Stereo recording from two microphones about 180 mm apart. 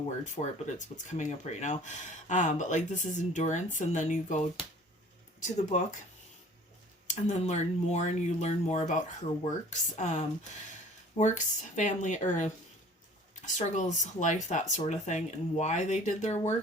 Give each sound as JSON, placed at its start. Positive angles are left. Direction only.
{"t": 0.4, "sound": "speech", "side_deg": 30}
{"t": 0.8, "sound": "speech", "side_deg": 40}
{"t": 7.1, "sound": "speech", "side_deg": 40}